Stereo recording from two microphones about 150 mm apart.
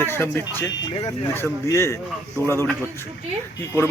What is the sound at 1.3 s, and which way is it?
Speech, 15° left (ahead or behind).